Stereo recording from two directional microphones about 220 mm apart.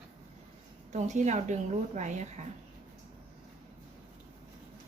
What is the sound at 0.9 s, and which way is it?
Speech, 30° right (ahead or behind).